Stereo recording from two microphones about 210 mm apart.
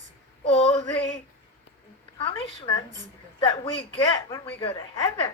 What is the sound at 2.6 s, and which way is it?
A woman's voice, 20° left (ahead or behind).